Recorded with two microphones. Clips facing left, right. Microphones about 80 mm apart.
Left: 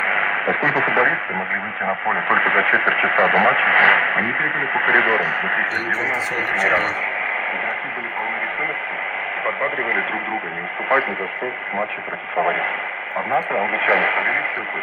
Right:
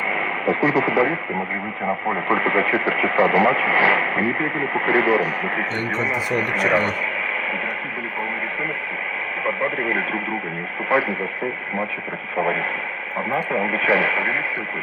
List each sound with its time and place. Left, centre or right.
0.0 s radio: left
2.0 s speech: left
9.6 s speech: left
13.3 s speech: left